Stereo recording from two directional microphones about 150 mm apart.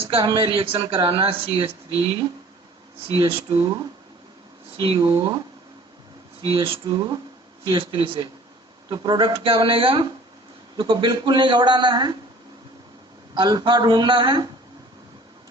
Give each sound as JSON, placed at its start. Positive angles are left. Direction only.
{"t": 0.0, "sound": "speech", "side_deg": -35}
{"t": 3.1, "sound": "speech", "side_deg": -40}
{"t": 4.8, "sound": "speech", "side_deg": -30}
{"t": 6.4, "sound": "speech", "side_deg": -35}
{"t": 13.3, "sound": "speech", "side_deg": -30}